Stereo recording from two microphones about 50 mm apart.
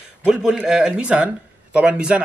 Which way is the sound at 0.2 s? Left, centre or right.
Centre.